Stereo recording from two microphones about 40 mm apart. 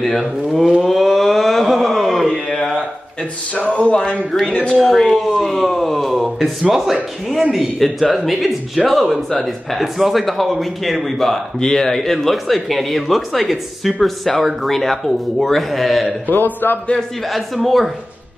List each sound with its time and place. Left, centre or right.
0.0 s speech: centre
0.8 s a sound: centre
2.3 s a sound: centre
3.7 s speech: left
4.8 s speech: centre
16.3 s speech: left
17.3 s speech: centre